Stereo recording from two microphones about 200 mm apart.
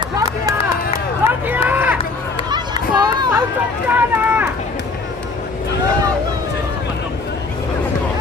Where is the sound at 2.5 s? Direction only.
20° right (ahead or behind).